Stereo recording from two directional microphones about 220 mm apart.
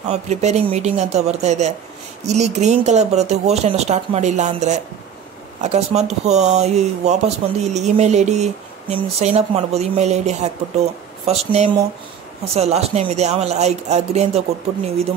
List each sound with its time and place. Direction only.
0.1 s speech: 30° right (ahead or behind)